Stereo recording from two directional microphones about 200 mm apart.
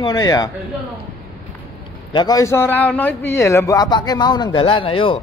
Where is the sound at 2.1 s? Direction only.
20° left (ahead or behind).